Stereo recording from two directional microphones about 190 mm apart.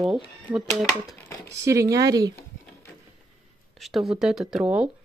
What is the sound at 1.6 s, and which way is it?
Speech, 15° right (ahead or behind).